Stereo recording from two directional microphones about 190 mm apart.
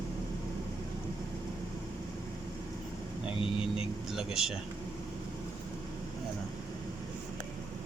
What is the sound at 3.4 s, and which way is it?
Speech, 30° left (ahead or behind).